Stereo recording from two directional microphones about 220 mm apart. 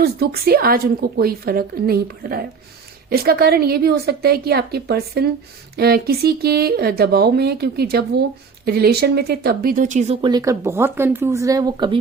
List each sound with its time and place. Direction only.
0.0 s a woman's voice: 45° right (ahead or behind); by 11.9 s 20° right (ahead or behind)